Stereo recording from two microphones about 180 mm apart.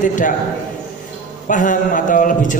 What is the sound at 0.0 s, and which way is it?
Speech, 45° left (ahead or behind).